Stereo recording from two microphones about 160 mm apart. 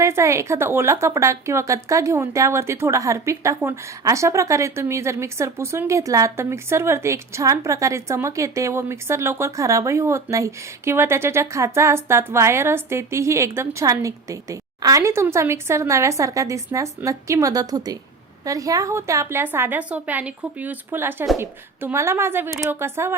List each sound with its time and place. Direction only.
0.0 s a woman's voice: 20° right (ahead or behind)